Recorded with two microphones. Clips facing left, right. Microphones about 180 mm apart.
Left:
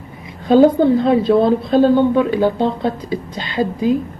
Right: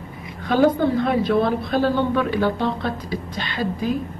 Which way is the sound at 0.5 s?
25° left (ahead or behind).